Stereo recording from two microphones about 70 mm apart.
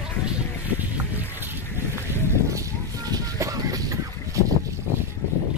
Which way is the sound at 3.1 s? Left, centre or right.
Right.